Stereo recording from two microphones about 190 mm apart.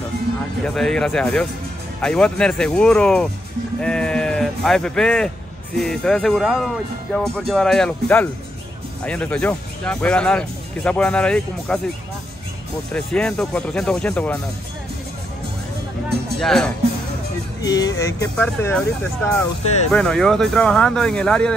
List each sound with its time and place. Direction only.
0.7 s speech: 5° left (ahead or behind)
12.9 s speech: 5° left (ahead or behind)
16.3 s speech: centre (ahead or behind)
17.6 s speech: 20° left (ahead or behind)
19.9 s speech: 5° left (ahead or behind)